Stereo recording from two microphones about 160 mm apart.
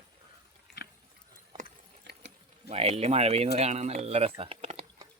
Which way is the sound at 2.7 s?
40° right (ahead or behind).